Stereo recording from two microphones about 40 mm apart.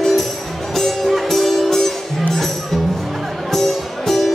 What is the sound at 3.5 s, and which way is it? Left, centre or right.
Music, centre.